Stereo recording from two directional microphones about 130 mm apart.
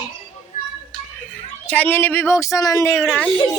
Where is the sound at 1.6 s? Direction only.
10° left (ahead or behind).